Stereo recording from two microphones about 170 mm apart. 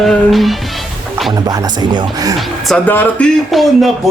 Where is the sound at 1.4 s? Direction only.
20° right (ahead or behind).